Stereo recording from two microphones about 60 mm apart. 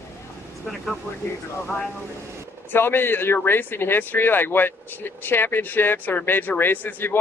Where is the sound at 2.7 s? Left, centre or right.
Left.